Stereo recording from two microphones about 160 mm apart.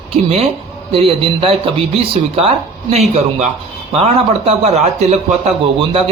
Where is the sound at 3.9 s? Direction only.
40° right (ahead or behind).